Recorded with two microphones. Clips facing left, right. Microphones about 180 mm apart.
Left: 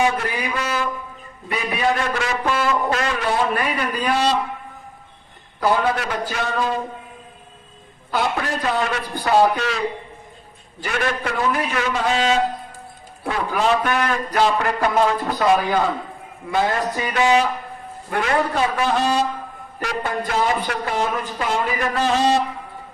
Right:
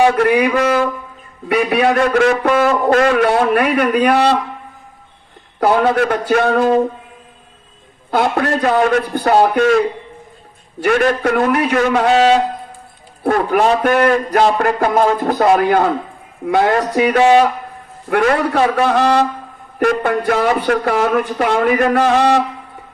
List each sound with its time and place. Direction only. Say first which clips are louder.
0.0 s a man's voice: right 9 dB; 60° right (ahead or behind)
1.5 s a man's voice: right 8 dB; 65° right (ahead or behind)
5.5 s a man's voice: right 6 dB; 60° right (ahead or behind)
8.1 s a man's voice: right 7 dB; 55° right (ahead or behind)
11.0 s a man's voice: right 8 dB; 50° right (ahead or behind)
11.7 s a man's voice: right 8 dB; 50° right (ahead or behind)
13.2 s a man's voice: right 7 dB; 55° right (ahead or behind)
15.6 s a man's voice: right 7 dB; 60° right (ahead or behind)
17.2 s a man's voice: right 5 dB; 55° right (ahead or behind)
19.8 s a man's voice: right 10 dB; 55° right (ahead or behind)